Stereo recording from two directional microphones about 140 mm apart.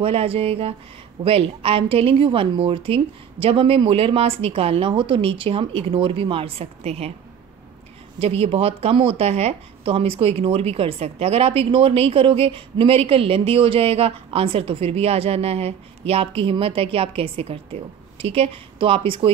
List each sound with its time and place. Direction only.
0.0 s a woman's voice: 45° right (ahead or behind)
8.2 s speech: 45° right (ahead or behind)